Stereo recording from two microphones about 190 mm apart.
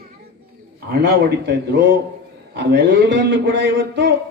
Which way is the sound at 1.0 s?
65° right (ahead or behind).